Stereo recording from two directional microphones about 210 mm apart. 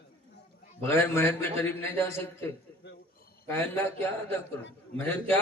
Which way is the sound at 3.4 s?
10° left (ahead or behind).